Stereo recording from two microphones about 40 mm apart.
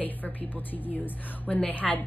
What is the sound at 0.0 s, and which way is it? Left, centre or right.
A woman's voice, left.